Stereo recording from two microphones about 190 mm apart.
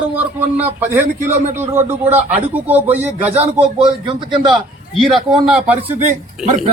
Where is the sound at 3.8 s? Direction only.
25° right (ahead or behind).